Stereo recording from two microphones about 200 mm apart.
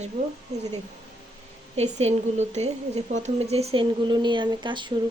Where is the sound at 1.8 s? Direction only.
35° right (ahead or behind).